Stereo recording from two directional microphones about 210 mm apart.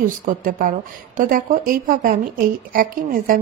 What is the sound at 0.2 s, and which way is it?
A woman's voice, 40° right (ahead or behind).